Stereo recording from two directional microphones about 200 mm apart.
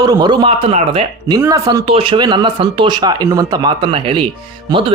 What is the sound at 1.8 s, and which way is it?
Speech, 25° right (ahead or behind).